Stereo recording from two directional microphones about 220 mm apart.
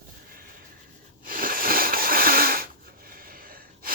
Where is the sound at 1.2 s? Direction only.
40° right (ahead or behind).